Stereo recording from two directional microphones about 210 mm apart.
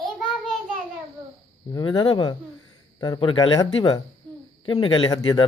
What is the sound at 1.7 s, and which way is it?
Speech, 20° left (ahead or behind).